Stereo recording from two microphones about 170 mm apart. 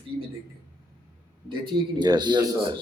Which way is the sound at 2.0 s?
25° right (ahead or behind).